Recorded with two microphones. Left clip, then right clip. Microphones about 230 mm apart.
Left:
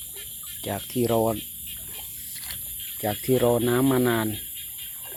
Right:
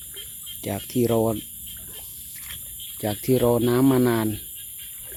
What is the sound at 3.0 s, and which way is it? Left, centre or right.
Speech, right.